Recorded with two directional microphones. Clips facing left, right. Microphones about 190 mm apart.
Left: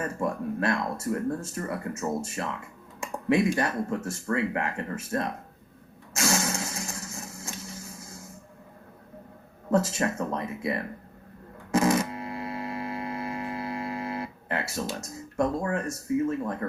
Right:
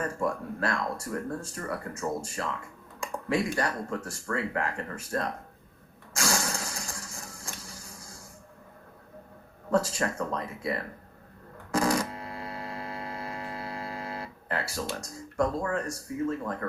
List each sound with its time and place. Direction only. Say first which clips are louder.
0.0 s speech: left 1 dB; 25° left (ahead or behind)
6.1 s vehicle: left 3 dB; 25° left (ahead or behind)
9.7 s speech: left 2 dB; 25° left (ahead or behind)
11.7 s a sound: left 3 dB; 25° left (ahead or behind)
15.0 s speech: left 1 dB; 25° left (ahead or behind)